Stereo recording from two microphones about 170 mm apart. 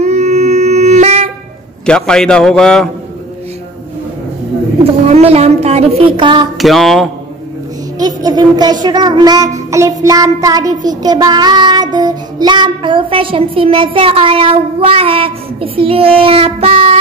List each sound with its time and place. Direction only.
0.0 s wind instrument: 40° right (ahead or behind)
1.9 s a man's voice: 5° left (ahead or behind)
5.0 s child singing: 40° right (ahead or behind)
6.6 s a man's voice: centre (ahead or behind)
8.0 s child singing: 25° right (ahead or behind)